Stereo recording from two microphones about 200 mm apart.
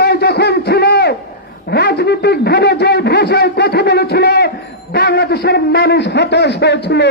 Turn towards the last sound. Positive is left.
turn(degrees=55)  # may be behind; listen again after turning